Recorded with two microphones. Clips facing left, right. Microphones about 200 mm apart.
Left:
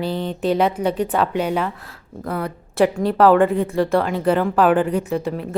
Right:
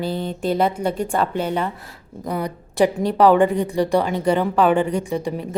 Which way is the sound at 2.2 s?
15° right (ahead or behind).